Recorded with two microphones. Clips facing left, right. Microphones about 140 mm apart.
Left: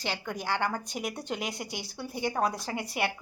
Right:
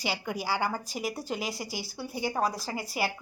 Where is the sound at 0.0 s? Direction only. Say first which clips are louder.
Right 2 dB; 10° right (ahead or behind).